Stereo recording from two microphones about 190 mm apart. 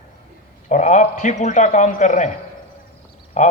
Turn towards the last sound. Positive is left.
turn(degrees=40)  # may be behind; listen again after turning